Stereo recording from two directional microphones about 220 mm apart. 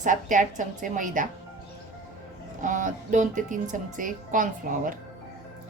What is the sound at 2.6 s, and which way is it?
Speech, 35° right (ahead or behind).